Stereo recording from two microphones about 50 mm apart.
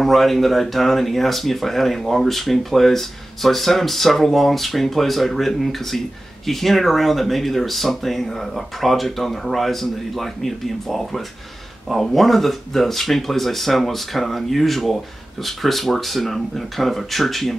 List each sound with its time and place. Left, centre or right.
0.0 s speech: centre